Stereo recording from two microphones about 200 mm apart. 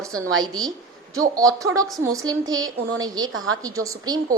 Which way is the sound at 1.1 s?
15° right (ahead or behind).